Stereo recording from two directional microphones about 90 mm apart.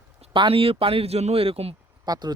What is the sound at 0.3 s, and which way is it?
Speech, 80° right.